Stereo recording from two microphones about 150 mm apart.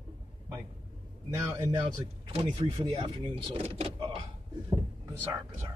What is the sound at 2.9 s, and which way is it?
Speech, 35° right (ahead or behind).